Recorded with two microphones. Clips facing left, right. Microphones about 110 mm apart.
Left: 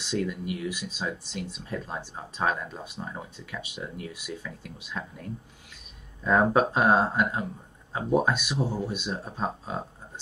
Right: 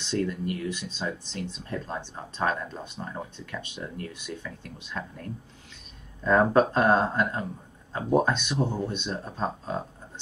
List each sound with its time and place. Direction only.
0.0 s speech: 10° left (ahead or behind)